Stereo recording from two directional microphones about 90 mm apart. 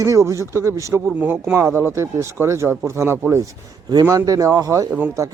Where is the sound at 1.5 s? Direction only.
30° right (ahead or behind).